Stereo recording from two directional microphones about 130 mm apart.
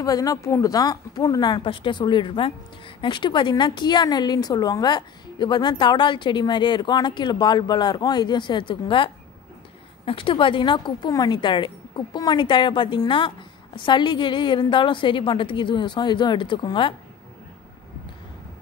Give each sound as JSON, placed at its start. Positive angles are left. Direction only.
{"t": 0.0, "sound": "a woman's voice", "side_deg": 25}